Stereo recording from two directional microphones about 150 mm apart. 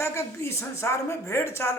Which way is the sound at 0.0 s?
15° left (ahead or behind).